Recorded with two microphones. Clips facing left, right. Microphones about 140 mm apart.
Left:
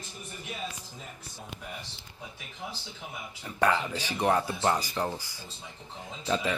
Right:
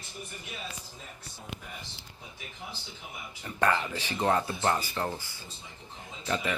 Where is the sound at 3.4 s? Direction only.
5° left (ahead or behind).